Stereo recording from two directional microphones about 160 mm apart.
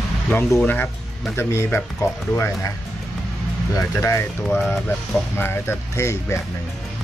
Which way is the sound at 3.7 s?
15° left (ahead or behind).